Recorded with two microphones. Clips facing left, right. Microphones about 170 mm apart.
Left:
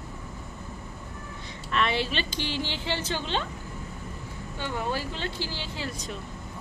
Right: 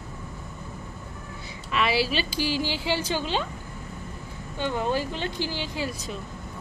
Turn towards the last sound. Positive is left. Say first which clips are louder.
# right 5 dB
turn(degrees=-15)  # may be behind; listen again after turning